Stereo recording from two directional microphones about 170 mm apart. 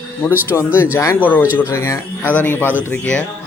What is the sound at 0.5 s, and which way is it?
Speech, 15° left (ahead or behind).